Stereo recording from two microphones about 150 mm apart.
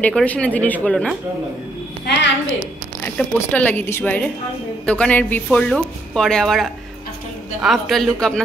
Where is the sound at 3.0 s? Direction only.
10° left (ahead or behind).